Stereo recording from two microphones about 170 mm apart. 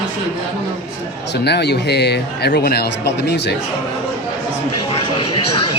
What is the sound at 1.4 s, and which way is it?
Speech, 75° left (ahead or behind).